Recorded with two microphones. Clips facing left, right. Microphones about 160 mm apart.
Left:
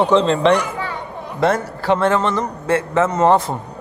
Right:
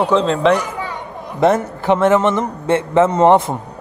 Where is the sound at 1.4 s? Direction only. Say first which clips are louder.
Right 4 dB; 20° right (ahead or behind).